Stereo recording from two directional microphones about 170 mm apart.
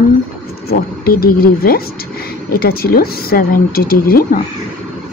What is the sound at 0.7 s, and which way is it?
Speech, 60° left (ahead or behind).